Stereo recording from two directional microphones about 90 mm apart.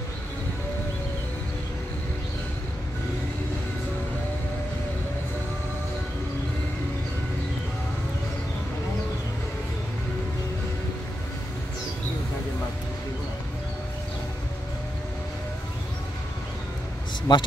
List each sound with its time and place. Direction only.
17.3 s speech: 50° left (ahead or behind)